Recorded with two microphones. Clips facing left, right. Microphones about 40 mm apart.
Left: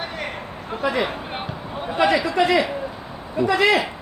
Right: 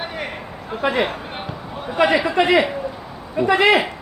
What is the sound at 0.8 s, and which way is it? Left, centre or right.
A man's voice, right.